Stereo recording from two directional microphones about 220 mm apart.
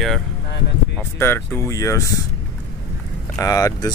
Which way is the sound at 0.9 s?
10° left (ahead or behind).